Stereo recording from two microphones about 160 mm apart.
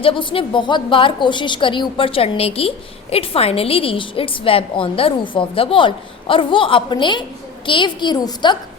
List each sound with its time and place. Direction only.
0.0 s a woman's voice: 30° left (ahead or behind)